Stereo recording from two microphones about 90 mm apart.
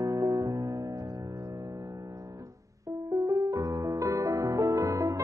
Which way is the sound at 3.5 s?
40° right (ahead or behind).